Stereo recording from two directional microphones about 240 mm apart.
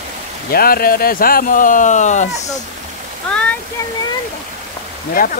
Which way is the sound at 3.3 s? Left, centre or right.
Centre.